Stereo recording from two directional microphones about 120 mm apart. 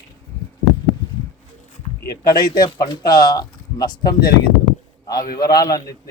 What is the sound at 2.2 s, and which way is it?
Speech, 35° left (ahead or behind).